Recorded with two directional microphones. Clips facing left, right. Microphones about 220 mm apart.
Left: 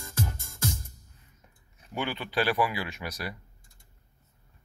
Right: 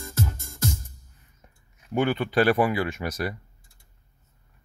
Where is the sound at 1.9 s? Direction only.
50° right (ahead or behind).